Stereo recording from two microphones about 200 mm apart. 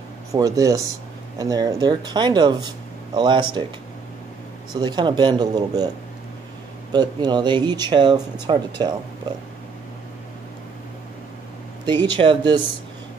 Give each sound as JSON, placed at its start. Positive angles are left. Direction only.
{"t": 0.3, "sound": "speech", "side_deg": -15}
{"t": 4.7, "sound": "speech", "side_deg": -20}
{"t": 6.9, "sound": "speech", "side_deg": -20}
{"t": 12.0, "sound": "speech", "side_deg": -25}